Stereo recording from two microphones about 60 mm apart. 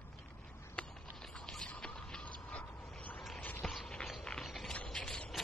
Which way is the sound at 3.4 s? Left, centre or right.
Left.